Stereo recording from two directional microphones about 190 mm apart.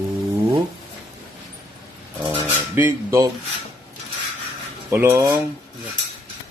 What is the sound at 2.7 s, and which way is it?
Speech, 15° right (ahead or behind).